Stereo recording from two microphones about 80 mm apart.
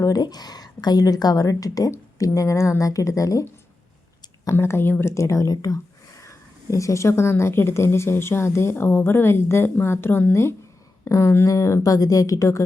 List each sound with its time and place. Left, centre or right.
0.0 s a woman's voice: left
4.5 s a woman's voice: left